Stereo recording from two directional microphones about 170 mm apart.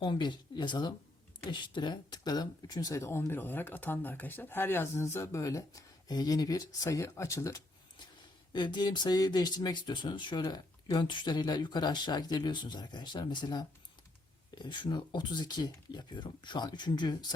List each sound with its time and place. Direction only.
0.0 s speech: 25° left (ahead or behind)